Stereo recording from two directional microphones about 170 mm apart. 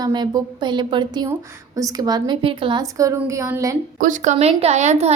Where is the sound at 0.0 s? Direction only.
25° right (ahead or behind).